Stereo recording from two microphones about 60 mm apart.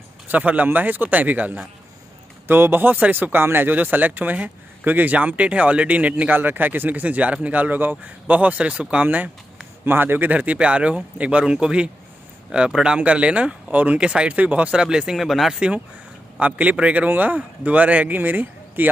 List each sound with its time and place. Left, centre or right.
0.3 s a man's voice: right
15.1 s speech: centre
16.3 s speech: right